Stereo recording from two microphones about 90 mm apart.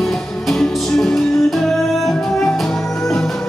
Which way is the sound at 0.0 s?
Centre (ahead or behind).